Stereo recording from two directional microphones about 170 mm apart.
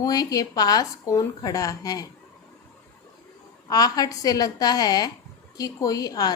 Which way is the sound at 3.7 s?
20° left (ahead or behind).